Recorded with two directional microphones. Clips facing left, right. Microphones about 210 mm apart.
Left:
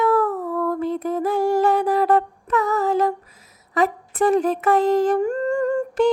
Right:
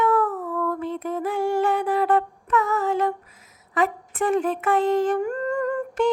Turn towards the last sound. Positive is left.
turn(degrees=30)  # may be behind; listen again after turning